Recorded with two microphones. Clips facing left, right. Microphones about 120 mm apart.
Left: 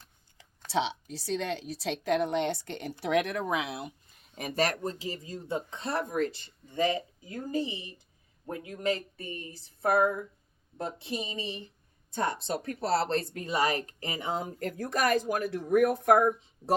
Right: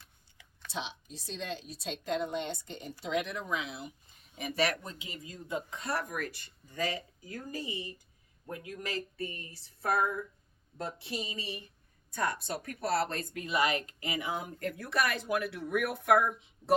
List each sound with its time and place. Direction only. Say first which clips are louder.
0.0 s a sound: left 2 dB; 40° left (ahead or behind)
0.7 s a woman's voice: left 10 dB; 85° left
4.4 s speech: left 2 dB; 45° left (ahead or behind)